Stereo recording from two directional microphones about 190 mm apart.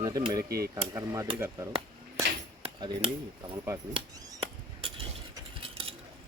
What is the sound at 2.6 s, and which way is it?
Speech, 30° right (ahead or behind).